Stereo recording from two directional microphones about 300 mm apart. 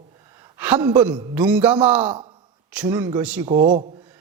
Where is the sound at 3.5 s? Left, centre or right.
Right.